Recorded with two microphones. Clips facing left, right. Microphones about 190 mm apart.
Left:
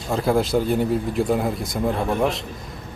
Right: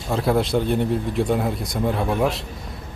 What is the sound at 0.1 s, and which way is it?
Speech, centre (ahead or behind).